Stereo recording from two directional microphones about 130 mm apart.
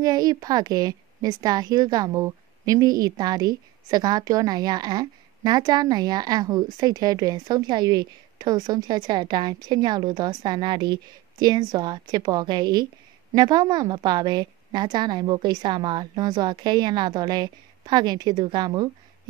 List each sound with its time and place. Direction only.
0.0 s a woman's voice: 30° right (ahead or behind)